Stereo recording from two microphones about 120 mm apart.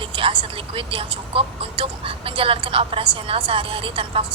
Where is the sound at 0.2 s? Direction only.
50° right (ahead or behind).